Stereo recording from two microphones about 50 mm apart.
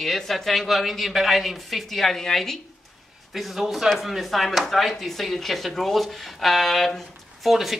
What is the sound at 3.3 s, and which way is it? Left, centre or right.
Speech, centre.